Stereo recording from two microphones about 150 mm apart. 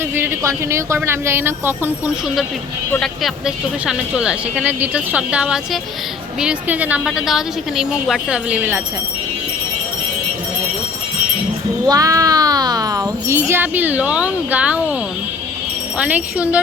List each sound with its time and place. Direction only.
0.2 s a woman's voice: 20° right (ahead or behind)
3.0 s a woman's voice: centre (ahead or behind)
11.9 s speech: 20° right (ahead or behind)
16.0 s a woman's voice: 10° right (ahead or behind)